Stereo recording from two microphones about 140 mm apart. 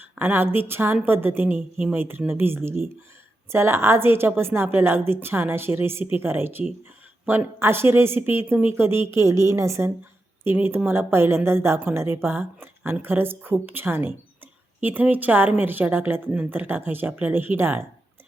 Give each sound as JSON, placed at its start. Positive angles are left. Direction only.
{"t": 0.0, "sound": "a woman's voice", "side_deg": -15}